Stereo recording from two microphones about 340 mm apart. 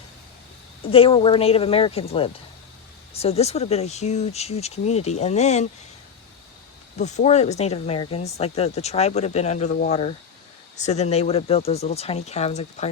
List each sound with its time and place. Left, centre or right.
0.9 s speech: centre
6.9 s speech: centre